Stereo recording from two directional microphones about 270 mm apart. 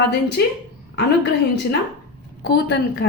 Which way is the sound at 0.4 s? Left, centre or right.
Left.